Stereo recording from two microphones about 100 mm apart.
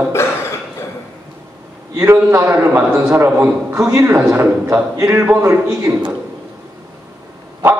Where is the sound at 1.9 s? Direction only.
30° right (ahead or behind).